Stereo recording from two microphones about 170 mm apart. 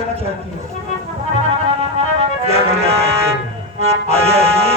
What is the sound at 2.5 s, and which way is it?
Music, 35° right (ahead or behind).